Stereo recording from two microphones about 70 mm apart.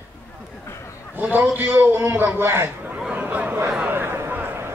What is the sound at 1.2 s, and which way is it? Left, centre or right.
A man's voice, right.